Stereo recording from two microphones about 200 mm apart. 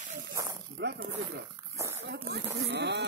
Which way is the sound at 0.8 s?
60° right (ahead or behind).